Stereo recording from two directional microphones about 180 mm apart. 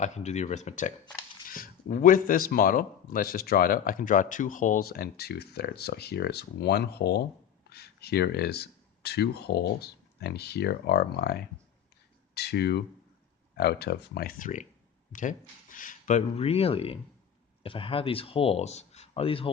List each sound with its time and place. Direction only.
0.0 s speech: 40° left (ahead or behind); by 11.4 s 60° left (ahead or behind)
12.3 s a sound: 65° left (ahead or behind)
13.6 s speech: 65° left (ahead or behind); by 19.5 s 30° left (ahead or behind)